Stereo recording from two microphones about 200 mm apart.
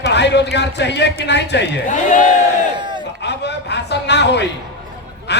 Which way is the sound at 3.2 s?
60° left (ahead or behind).